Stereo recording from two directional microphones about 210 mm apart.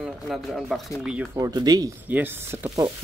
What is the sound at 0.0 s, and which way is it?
Speech, centre (ahead or behind).